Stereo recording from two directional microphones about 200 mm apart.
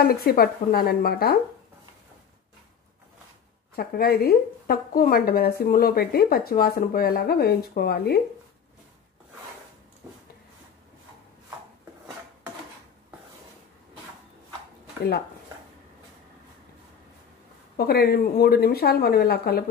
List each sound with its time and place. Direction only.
0.0 s a woman's voice: 50° left (ahead or behind)
3.7 s a woman's voice: 50° left (ahead or behind)
17.7 s a woman's voice: 50° left (ahead or behind)